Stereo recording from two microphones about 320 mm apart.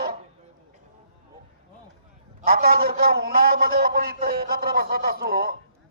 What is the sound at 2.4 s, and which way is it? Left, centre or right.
A man's voice, right.